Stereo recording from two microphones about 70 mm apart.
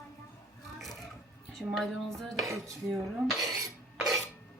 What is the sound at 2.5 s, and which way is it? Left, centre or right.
Dishes, right.